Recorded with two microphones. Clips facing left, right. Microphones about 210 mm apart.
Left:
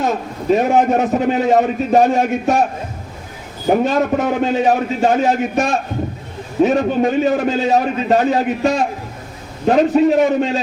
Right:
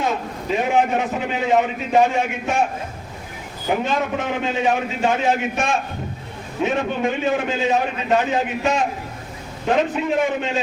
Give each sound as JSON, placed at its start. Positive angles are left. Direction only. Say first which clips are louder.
{"t": 0.5, "sound": "a man's voice", "louder": "left 5 dB", "side_deg": 40}
{"t": 3.7, "sound": "a man's voice", "louder": "left 7 dB", "side_deg": 40}